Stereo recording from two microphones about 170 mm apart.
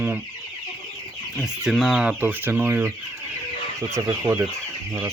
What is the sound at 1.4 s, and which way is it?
Speech, centre (ahead or behind).